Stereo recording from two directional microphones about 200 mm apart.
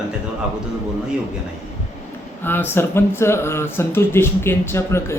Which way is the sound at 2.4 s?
10° left (ahead or behind).